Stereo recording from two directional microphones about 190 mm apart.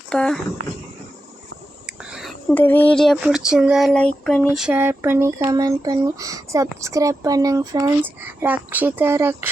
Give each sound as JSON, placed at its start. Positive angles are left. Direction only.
{"t": 0.1, "sound": "speech", "side_deg": 5}
{"t": 1.9, "sound": "speech", "side_deg": -5}